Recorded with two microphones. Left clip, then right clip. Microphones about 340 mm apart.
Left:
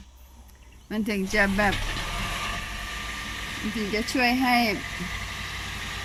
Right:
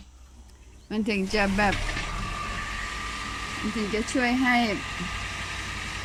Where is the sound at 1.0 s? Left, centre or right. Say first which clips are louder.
Left 2 dB; centre.